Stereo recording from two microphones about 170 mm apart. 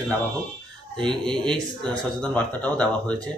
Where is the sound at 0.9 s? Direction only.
30° right (ahead or behind).